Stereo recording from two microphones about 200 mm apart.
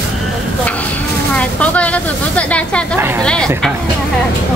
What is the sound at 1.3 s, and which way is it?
Speech, 5° left (ahead or behind).